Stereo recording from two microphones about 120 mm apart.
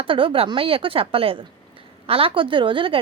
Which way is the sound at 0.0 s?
50° right (ahead or behind).